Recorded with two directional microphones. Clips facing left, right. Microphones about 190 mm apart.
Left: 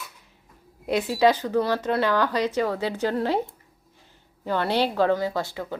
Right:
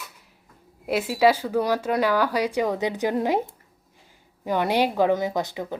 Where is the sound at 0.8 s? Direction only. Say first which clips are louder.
Even; 5° right (ahead or behind).